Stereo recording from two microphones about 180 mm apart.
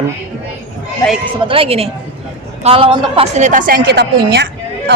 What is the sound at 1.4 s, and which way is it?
A man's voice, 30° right (ahead or behind).